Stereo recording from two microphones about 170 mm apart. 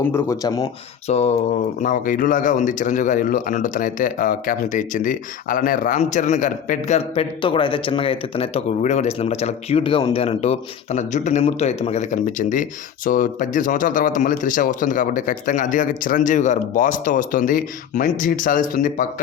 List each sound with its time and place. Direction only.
0.0 s speech: 15° left (ahead or behind)
1.0 s a sound: 40° left (ahead or behind)
1.8 s speech: 50° left (ahead or behind)